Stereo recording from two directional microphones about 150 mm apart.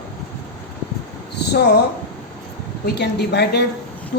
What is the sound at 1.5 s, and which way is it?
Speech, 90° left.